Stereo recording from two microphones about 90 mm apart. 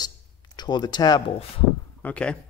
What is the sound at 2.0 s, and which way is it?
Speech, 15° left (ahead or behind).